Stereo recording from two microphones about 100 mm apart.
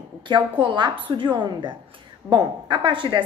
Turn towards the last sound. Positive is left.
turn(degrees=-55)  # may be behind; listen again after turning